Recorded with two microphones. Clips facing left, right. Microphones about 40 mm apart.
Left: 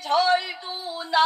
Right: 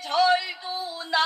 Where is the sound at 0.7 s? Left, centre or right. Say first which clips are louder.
Even; left.